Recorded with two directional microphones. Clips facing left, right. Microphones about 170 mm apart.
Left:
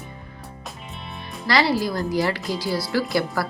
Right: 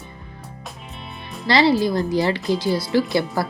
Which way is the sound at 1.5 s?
25° right (ahead or behind).